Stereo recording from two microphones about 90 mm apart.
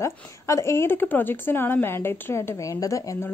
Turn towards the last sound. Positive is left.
turn(degrees=40)  # may be behind; listen again after turning